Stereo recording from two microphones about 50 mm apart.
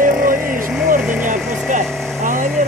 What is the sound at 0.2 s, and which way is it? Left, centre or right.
Vehicle, right.